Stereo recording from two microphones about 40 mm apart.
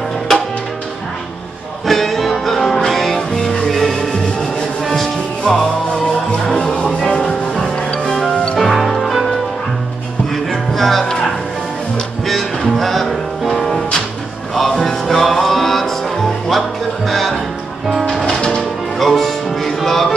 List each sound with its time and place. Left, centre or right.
1.9 s music: centre; by 8.5 s left
8.5 s music: centre
10.7 s music: centre
12.3 s music: centre
13.7 s music: left
15.0 s music: centre
18.4 s music: centre
18.9 s music: centre